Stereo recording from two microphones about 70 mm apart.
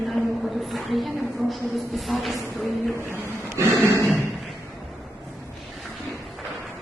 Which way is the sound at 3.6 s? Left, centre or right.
Right.